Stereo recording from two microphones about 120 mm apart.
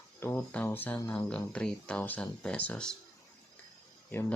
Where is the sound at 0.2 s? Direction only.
20° left (ahead or behind).